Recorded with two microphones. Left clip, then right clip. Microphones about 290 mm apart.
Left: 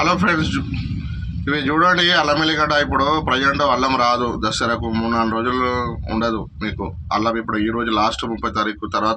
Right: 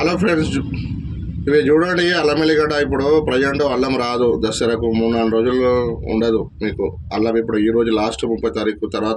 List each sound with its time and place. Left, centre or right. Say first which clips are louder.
0.0 s a man's voice: even; left